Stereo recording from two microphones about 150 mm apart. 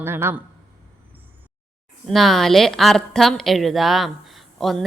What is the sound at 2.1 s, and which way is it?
A woman's voice, centre (ahead or behind).